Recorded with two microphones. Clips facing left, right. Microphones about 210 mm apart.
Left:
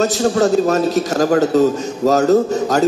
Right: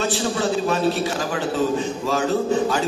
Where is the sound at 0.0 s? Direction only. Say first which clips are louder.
Left 8 dB; 45° left (ahead or behind).